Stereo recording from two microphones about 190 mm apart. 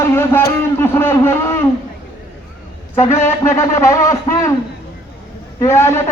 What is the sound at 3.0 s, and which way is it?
A man's voice, 15° left (ahead or behind).